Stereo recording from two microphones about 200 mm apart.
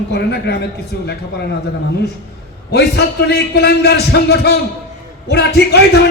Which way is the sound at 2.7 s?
55° left (ahead or behind).